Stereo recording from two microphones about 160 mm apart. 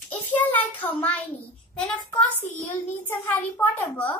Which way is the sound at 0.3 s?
10° left (ahead or behind).